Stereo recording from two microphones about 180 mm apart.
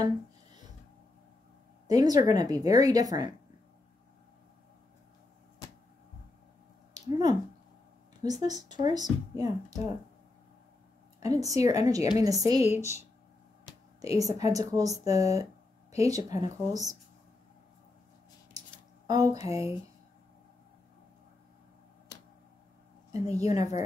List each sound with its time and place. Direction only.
1.9 s a woman's voice: 20° right (ahead or behind)
6.9 s squish: 25° right (ahead or behind)
8.2 s a woman's voice: 20° right (ahead or behind)
11.1 s a woman's voice: 20° right (ahead or behind)
14.0 s a woman's voice: 20° right (ahead or behind)
18.6 s a sound: 20° right (ahead or behind)
19.0 s a woman's voice: 20° right (ahead or behind)
23.1 s a woman's voice: 20° right (ahead or behind)